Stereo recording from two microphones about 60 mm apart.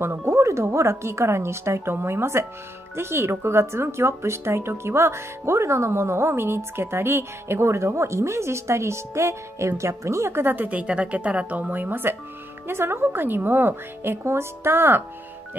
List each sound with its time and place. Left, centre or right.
0.0 s speech: right
10.4 s a woman's voice: right